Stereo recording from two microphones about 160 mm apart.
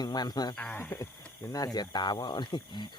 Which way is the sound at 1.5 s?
25° left (ahead or behind).